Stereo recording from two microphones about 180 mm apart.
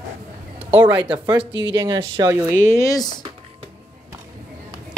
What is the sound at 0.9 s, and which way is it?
Speech, 25° right (ahead or behind).